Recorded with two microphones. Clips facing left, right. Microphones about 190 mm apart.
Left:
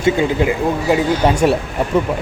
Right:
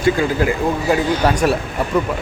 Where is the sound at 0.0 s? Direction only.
20° left (ahead or behind).